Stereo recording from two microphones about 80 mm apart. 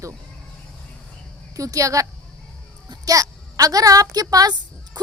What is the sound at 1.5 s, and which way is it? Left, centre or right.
A woman's voice, right.